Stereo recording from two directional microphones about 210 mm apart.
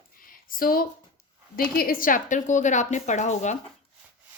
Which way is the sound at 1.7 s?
45° left (ahead or behind).